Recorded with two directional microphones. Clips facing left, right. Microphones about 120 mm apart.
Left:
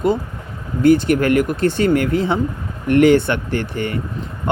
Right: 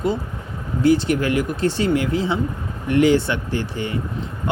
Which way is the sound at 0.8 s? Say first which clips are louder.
Left 4 dB; 55° left (ahead or behind).